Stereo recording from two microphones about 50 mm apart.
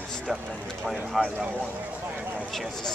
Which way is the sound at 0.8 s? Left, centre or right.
Centre.